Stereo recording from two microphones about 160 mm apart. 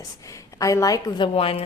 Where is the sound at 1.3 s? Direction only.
35° left (ahead or behind).